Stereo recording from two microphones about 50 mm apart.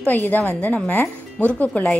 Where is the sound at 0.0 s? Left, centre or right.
Left.